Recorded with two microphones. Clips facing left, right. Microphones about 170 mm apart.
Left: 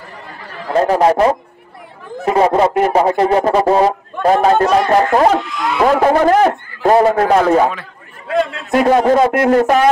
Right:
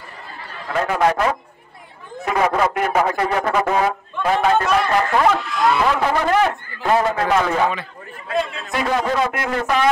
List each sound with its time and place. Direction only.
0.7 s a man's voice: 35° left (ahead or behind)
8.7 s a man's voice: 45° left (ahead or behind)